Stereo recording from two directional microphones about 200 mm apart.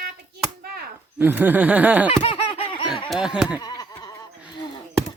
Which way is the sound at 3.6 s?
20° left (ahead or behind).